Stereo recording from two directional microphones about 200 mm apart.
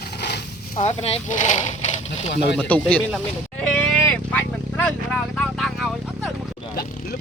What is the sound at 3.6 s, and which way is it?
Vehicle, 5° left (ahead or behind).